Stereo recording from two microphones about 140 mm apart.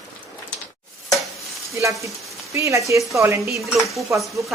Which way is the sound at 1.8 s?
20° right (ahead or behind).